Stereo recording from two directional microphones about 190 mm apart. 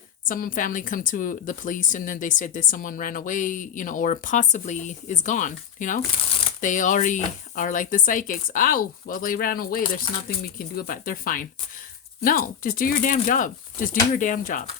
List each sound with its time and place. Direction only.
0.3 s a woman's voice: 45° left (ahead or behind)